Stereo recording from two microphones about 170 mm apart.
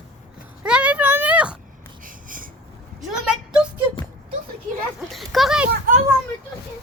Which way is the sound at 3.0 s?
5° right (ahead or behind).